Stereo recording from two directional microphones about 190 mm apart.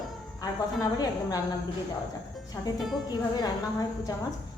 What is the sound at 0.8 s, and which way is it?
Speech, 20° left (ahead or behind).